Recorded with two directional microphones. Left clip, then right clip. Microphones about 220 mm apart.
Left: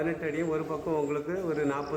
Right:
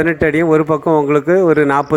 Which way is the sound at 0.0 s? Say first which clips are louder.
Right 17 dB; 40° right (ahead or behind).